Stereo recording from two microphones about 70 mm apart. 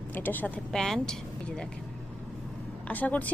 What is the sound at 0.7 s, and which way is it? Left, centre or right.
Speech, centre.